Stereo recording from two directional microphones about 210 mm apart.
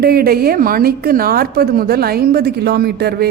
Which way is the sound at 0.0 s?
45° right (ahead or behind).